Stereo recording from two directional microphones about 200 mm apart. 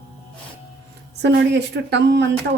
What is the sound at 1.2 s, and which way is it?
Speech, 60° right (ahead or behind).